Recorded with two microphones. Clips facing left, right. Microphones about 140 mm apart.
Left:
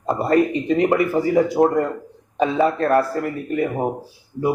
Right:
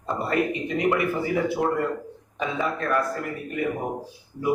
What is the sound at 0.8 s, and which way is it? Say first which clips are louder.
Speech: left 4 dB; 35° left (ahead or behind).